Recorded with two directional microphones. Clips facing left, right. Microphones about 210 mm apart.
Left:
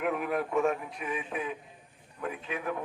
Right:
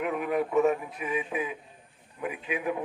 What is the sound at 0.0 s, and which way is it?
A man's voice, centre (ahead or behind).